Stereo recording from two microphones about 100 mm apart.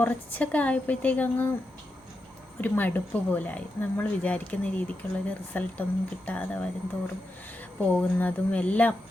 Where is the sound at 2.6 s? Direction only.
15° left (ahead or behind).